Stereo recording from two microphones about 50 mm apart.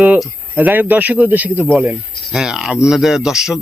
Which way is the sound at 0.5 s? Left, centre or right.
Right.